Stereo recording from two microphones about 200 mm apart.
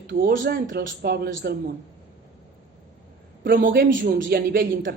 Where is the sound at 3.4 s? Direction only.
45° right (ahead or behind).